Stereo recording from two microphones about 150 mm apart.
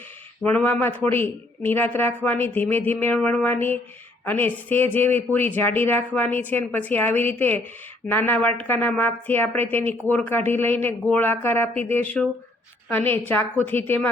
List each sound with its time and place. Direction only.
0.4 s speech: 10° left (ahead or behind)